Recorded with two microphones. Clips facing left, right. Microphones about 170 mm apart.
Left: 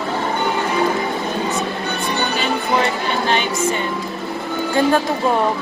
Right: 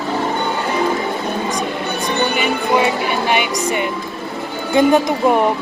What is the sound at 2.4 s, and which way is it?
Speech, 10° right (ahead or behind).